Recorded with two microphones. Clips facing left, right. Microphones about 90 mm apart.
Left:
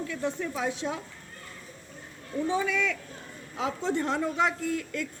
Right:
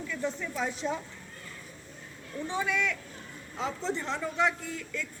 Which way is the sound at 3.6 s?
50° left (ahead or behind).